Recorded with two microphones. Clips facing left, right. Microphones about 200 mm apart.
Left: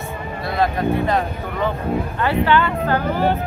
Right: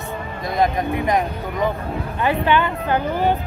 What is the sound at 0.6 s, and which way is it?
A woman's voice, 15° right (ahead or behind).